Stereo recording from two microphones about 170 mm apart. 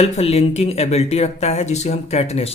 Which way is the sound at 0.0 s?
35° left (ahead or behind).